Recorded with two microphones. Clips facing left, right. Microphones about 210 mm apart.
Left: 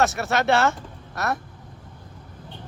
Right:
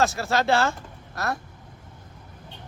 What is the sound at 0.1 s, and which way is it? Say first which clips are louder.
Speech: left 1 dB; 20° left (ahead or behind).